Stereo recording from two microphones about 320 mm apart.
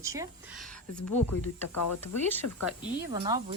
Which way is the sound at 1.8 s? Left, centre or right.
Left.